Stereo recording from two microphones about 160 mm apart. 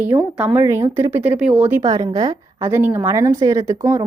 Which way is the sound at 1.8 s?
20° right (ahead or behind).